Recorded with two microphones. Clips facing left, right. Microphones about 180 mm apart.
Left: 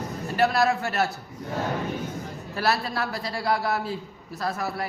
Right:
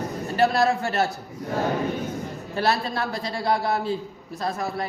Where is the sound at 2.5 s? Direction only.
25° right (ahead or behind).